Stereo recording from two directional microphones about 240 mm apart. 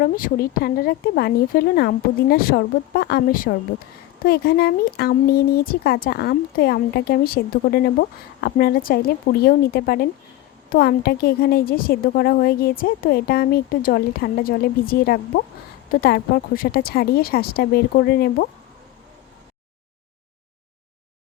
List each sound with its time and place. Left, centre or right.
0.0 s speech: left